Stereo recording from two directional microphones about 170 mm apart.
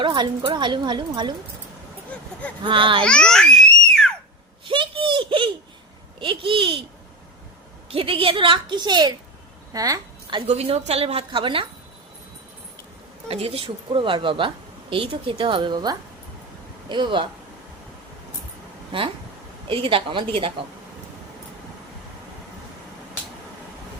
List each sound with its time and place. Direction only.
0.0 s speech: 30° right (ahead or behind)
2.1 s vehicle: 5° left (ahead or behind)
2.6 s a woman's voice: 30° right (ahead or behind)
3.0 s babbling: 5° left (ahead or behind)
4.6 s a sound: 30° right (ahead or behind)
6.1 s a woman's voice: 30° right (ahead or behind)
7.9 s a woman's voice: 30° right (ahead or behind)
13.2 s speech: 35° right (ahead or behind)
18.9 s a woman's voice: 30° right (ahead or behind)